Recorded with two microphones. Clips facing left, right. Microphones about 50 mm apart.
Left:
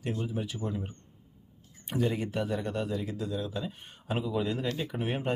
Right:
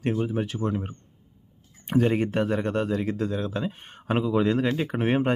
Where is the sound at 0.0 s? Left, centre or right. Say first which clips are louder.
Right 8 dB; right.